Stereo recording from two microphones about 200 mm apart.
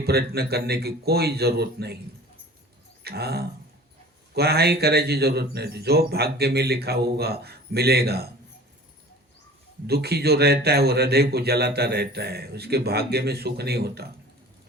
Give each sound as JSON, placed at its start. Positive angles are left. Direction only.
{"t": 0.0, "sound": "a man's voice", "side_deg": -50}
{"t": 3.0, "sound": "a man's voice", "side_deg": -55}
{"t": 9.8, "sound": "a man's voice", "side_deg": -55}